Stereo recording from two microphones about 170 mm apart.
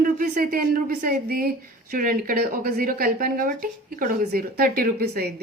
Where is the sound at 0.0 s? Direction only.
55° right (ahead or behind).